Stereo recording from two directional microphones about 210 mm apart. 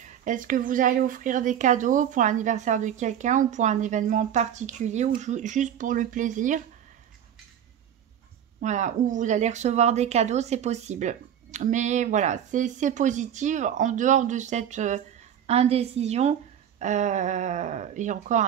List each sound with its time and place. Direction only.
0.0 s speech: 35° right (ahead or behind)
8.5 s speech: 35° right (ahead or behind)